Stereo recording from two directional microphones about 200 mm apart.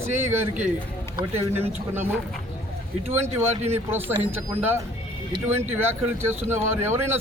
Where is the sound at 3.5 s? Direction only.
35° right (ahead or behind).